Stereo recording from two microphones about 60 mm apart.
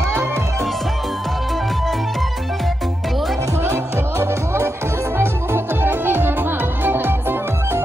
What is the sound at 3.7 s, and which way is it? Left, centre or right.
Music, right.